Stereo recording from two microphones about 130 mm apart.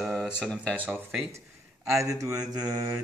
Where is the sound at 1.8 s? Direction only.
25° right (ahead or behind).